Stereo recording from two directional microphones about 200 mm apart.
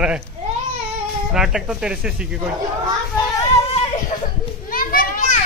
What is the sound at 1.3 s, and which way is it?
Speech, 5° right (ahead or behind).